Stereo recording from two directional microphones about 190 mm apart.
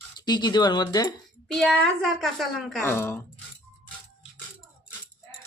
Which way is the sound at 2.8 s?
10° left (ahead or behind).